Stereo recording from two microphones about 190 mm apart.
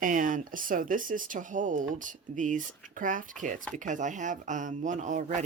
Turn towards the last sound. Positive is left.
turn(degrees=-40)  # may be behind; listen again after turning